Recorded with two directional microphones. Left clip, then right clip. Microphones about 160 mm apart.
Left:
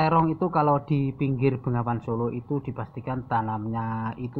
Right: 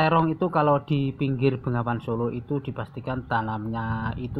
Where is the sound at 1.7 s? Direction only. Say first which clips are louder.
Right 1 dB; 20° right (ahead or behind).